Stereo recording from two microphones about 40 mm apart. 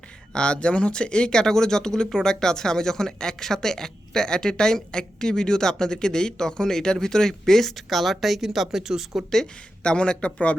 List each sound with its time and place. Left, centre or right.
0.3 s speech: left; by 9.2 s centre
9.8 s speech: left